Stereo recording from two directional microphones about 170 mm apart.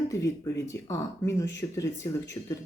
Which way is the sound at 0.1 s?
20° left (ahead or behind).